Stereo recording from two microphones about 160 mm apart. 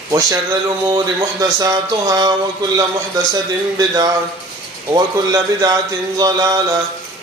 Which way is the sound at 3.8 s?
20° right (ahead or behind).